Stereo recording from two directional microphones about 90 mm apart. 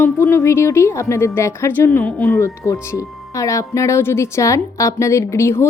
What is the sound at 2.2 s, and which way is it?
A woman's voice, 30° left (ahead or behind).